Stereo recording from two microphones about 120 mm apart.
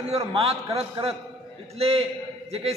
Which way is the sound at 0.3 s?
55° right (ahead or behind).